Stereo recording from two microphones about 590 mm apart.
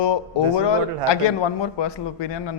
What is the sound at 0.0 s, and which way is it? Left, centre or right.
A man's voice, left.